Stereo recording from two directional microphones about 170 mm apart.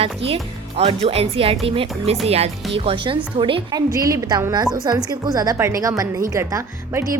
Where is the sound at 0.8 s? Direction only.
35° right (ahead or behind).